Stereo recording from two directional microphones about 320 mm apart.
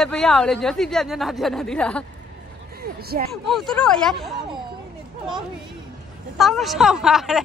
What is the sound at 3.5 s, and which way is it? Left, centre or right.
Speech, centre.